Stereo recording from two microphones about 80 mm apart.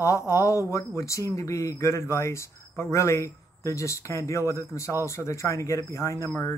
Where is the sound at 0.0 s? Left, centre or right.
Left.